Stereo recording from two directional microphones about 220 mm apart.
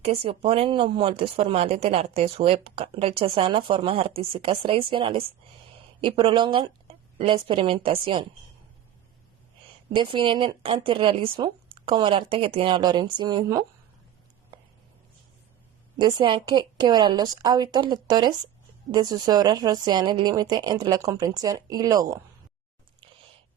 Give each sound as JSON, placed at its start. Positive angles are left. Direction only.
{"t": 0.0, "sound": "speech", "side_deg": -25}
{"t": 9.9, "sound": "speech", "side_deg": -20}
{"t": 16.0, "sound": "a woman's voice", "side_deg": -20}